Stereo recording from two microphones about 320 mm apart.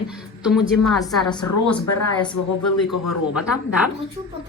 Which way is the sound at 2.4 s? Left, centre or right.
Left.